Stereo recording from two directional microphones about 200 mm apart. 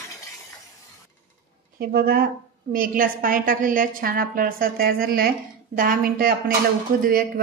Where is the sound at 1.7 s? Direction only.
50° right (ahead or behind).